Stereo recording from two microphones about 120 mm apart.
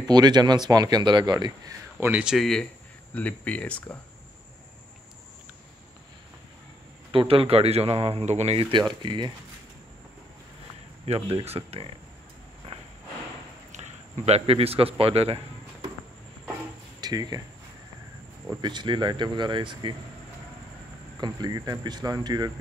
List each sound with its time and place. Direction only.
0.0 s speech: 35° right (ahead or behind)
2.0 s speech: 15° right (ahead or behind)
2.3 s speech: centre (ahead or behind)
3.2 s speech: 10° left (ahead or behind)
7.1 s speech: 50° right (ahead or behind); by 8.6 s 65° right (ahead or behind)
9.0 s speech: 40° right (ahead or behind)
11.1 s speech: 50° right (ahead or behind)
13.7 s a sound: 75° right (ahead or behind); by 15.9 s 50° right (ahead or behind)
17.0 s speech: 35° right (ahead or behind)
18.6 s speech: 40° right (ahead or behind)
21.2 s speech: 35° right (ahead or behind)